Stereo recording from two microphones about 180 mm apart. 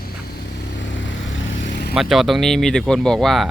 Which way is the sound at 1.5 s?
85° left.